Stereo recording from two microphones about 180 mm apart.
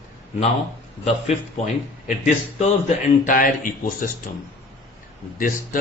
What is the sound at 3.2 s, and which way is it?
Speech, 50° left (ahead or behind).